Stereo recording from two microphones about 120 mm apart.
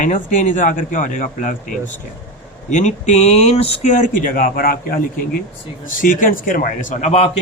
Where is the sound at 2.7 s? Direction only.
80° left.